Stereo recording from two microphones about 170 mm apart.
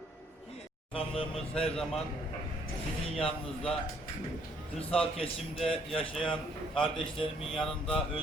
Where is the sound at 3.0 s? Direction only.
35° left (ahead or behind).